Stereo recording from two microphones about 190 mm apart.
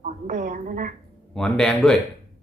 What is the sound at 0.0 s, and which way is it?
Speech, 40° right (ahead or behind).